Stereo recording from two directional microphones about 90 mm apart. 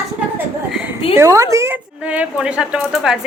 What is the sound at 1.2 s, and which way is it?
Speech, 35° right (ahead or behind).